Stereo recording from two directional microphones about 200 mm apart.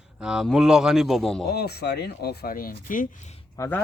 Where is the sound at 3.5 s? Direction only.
15° left (ahead or behind).